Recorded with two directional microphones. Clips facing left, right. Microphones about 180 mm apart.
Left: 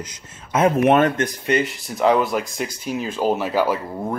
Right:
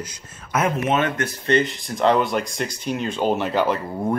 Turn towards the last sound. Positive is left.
turn(degrees=5)  # may be behind; listen again after turning